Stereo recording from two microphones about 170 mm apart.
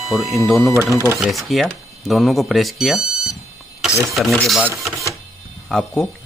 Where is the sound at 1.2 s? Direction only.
Centre (ahead or behind).